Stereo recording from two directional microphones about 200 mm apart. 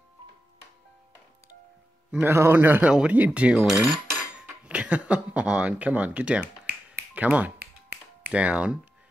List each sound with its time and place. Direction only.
2.0 s speech: 10° right (ahead or behind)
6.4 s finger snapping: 55° right (ahead or behind)
7.2 s speech: 5° right (ahead or behind)